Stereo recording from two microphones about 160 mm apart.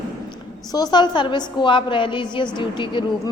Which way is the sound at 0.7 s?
25° left (ahead or behind).